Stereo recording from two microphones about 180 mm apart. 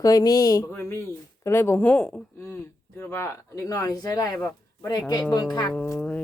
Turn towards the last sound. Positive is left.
turn(degrees=5)  # may be behind; listen again after turning